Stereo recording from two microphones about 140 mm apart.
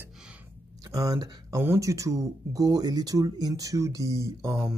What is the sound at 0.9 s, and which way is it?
Speech, 25° right (ahead or behind).